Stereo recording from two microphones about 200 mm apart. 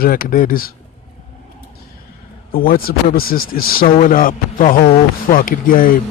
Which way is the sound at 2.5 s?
45° left (ahead or behind).